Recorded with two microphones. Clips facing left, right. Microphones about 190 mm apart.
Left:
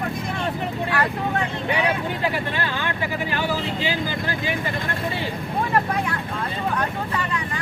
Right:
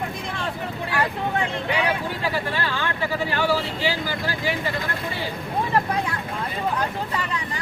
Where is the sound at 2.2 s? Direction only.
20° left (ahead or behind).